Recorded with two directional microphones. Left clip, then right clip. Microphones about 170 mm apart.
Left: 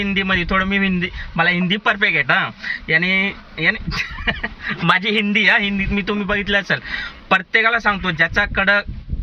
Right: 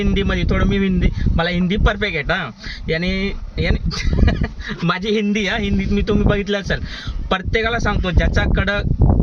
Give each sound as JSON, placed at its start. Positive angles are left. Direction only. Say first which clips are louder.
{"t": 0.0, "sound": "speech", "louder": "left 3 dB", "side_deg": -30}